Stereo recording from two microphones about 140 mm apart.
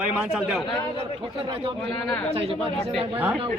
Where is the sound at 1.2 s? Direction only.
40° right (ahead or behind).